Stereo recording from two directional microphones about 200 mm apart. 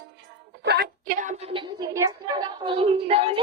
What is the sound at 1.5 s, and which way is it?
A woman's voice, 20° right (ahead or behind).